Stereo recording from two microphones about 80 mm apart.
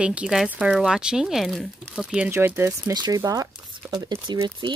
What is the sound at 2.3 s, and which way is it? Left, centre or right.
Speech, right.